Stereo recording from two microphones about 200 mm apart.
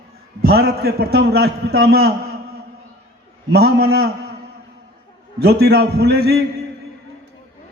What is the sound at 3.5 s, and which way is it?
Speech, 55° right (ahead or behind).